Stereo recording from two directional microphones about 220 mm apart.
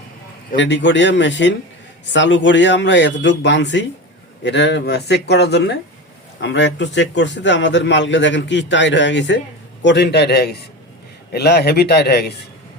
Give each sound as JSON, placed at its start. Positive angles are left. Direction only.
{"t": 0.5, "sound": "a man's voice", "side_deg": 55}